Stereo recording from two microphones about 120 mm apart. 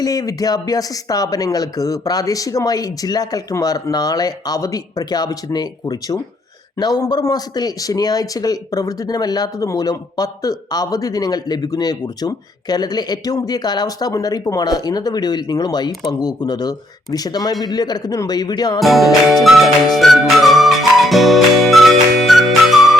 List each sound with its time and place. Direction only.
0.0 s speech: 30° left (ahead or behind)
18.8 s music: centre (ahead or behind)